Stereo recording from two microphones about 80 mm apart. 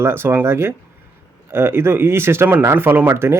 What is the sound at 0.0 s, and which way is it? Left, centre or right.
Speech, right.